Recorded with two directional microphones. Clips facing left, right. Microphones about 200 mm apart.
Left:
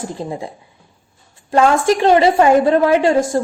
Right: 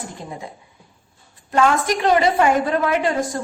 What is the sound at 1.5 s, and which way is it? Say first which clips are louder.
A woman's voice: left 5 dB; 30° left (ahead or behind).